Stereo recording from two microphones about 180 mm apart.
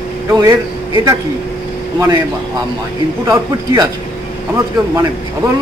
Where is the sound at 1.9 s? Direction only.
20° right (ahead or behind).